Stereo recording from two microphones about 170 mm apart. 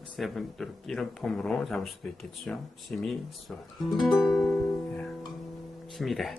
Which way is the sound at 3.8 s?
Centre (ahead or behind).